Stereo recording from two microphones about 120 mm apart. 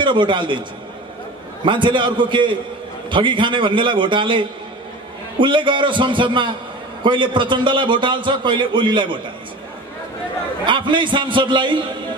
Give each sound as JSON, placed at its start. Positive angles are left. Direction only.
{"t": 0.0, "sound": "a man's voice", "side_deg": -40}
{"t": 10.6, "sound": "a man's voice", "side_deg": -40}